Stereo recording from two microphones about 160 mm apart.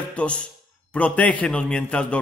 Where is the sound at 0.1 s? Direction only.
5° left (ahead or behind).